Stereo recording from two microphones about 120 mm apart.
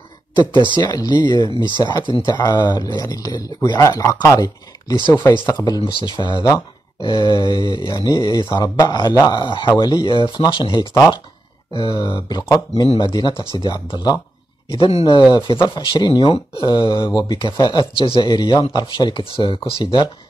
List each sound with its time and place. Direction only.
0.7 s speech: 35° left (ahead or behind)
4.4 s speech: 35° left (ahead or behind)
5.8 s speech: 40° left (ahead or behind)
10.9 s speech: 25° left (ahead or behind)
11.7 s speech: 40° left (ahead or behind)
14.7 s speech: 55° left (ahead or behind)
15.3 s speech: 35° left (ahead or behind)
17.9 s speech: 50° left (ahead or behind)
19.8 s speech: 40° left (ahead or behind)